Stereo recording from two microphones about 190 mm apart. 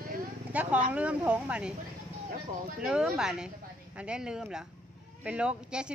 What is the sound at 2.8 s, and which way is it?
A man's voice, 5° right (ahead or behind).